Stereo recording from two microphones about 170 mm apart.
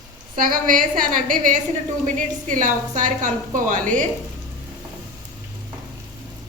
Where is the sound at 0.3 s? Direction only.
55° right (ahead or behind).